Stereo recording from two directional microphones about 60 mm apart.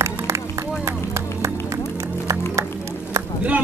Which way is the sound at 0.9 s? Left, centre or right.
Right.